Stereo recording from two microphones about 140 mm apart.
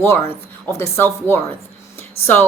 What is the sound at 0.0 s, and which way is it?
A woman's voice, 15° left (ahead or behind).